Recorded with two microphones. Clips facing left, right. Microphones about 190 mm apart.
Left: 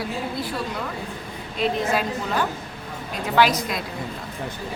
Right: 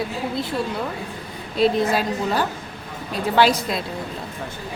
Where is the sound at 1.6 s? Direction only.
35° right (ahead or behind).